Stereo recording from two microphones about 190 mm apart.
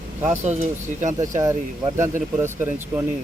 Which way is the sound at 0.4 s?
35° right (ahead or behind).